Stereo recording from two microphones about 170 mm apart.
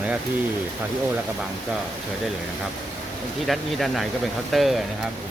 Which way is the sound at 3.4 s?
Centre (ahead or behind).